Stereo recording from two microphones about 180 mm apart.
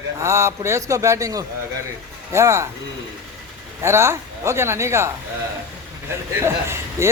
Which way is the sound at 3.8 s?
15° right (ahead or behind).